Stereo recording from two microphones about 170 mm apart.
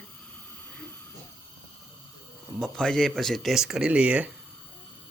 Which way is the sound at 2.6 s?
5° left (ahead or behind).